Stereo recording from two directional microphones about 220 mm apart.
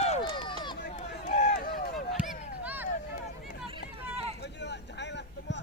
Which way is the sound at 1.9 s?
Centre (ahead or behind).